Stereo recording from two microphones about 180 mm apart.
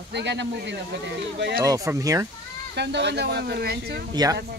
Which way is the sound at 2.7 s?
70° right (ahead or behind).